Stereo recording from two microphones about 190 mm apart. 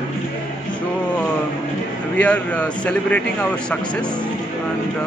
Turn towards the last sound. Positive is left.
turn(degrees=5)  # may be behind; listen again after turning